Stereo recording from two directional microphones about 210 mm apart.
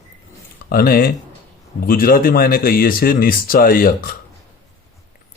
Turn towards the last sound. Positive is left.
turn(degrees=45)  # may be behind; listen again after turning